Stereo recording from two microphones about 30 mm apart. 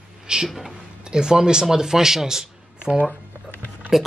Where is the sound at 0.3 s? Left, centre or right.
Right.